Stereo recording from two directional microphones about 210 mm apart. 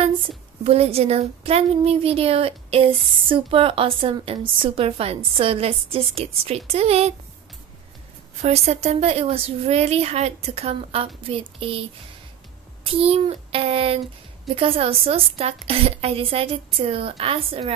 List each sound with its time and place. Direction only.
0.7 s speech: 30° right (ahead or behind)
8.4 s speech: 30° right (ahead or behind)
12.8 s speech: 25° right (ahead or behind)